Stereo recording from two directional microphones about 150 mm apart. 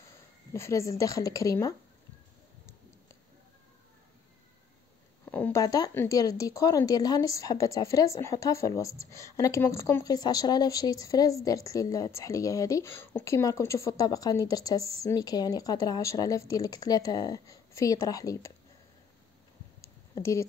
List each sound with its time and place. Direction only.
0.5 s speech: 20° left (ahead or behind)
5.3 s a sound: 10° left (ahead or behind)
5.6 s speech: 25° left (ahead or behind)
20.2 s speech: 20° left (ahead or behind)